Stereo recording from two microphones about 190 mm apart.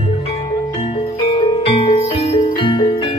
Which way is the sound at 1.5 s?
30° left (ahead or behind).